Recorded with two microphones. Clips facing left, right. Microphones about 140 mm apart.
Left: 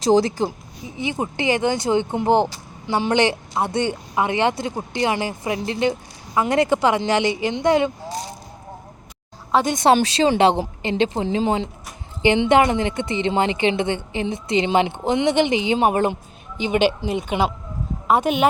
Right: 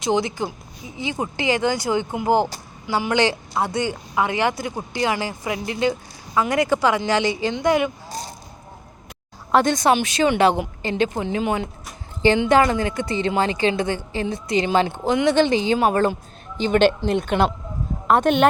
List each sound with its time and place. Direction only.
0.0 s a woman's voice: 35° left (ahead or behind)
1.2 s a woman's voice: 20° left (ahead or behind)
9.9 s a woman's voice: 30° left (ahead or behind); by 18.4 s 5° left (ahead or behind)